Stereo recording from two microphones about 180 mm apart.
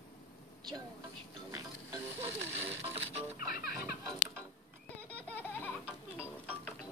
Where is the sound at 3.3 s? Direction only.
55° left (ahead or behind).